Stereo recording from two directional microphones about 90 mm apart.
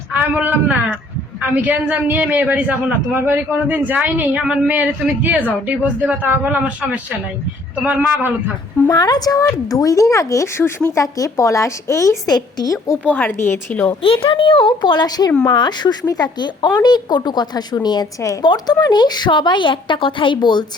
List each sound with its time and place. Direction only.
0.1 s a man's voice: 15° right (ahead or behind)
4.4 s a man's voice: 10° right (ahead or behind)
8.9 s speech: 50° left (ahead or behind)
13.1 s speech: 20° left (ahead or behind)
14.0 s a child's voice: 90° left; by 20.7 s 55° left (ahead or behind)